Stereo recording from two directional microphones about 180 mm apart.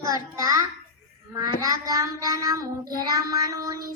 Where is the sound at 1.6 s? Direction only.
20° right (ahead or behind).